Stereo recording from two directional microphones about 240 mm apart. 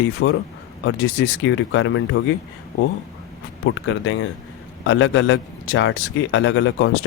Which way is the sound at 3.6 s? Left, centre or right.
Left.